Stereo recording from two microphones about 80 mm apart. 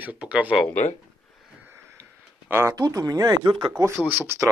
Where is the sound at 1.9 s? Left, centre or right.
Right.